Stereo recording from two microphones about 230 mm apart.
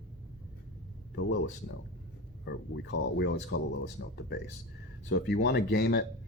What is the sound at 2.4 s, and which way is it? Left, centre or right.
Speech, left.